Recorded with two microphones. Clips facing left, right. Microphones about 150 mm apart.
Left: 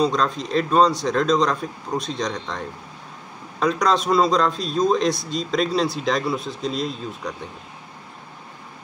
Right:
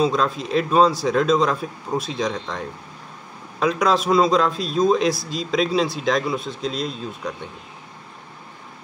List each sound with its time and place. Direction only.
0.0 s speech: 5° right (ahead or behind)